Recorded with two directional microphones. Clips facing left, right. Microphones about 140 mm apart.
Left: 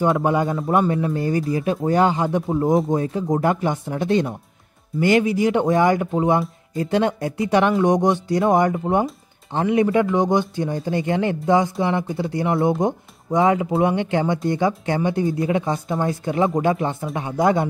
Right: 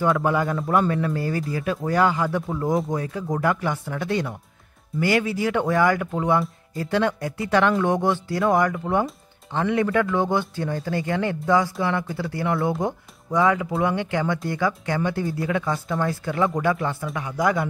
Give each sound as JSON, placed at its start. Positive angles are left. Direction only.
{"t": 0.0, "sound": "speech", "side_deg": 20}